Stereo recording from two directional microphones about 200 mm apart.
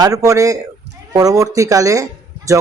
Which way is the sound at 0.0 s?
15° right (ahead or behind).